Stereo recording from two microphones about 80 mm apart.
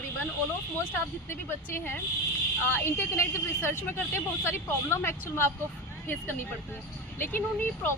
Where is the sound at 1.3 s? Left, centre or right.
Left.